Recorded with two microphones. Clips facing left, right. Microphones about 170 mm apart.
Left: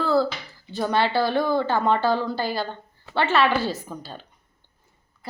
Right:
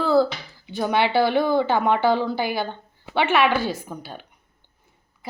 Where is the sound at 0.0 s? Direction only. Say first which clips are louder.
Right 3 dB; 15° right (ahead or behind).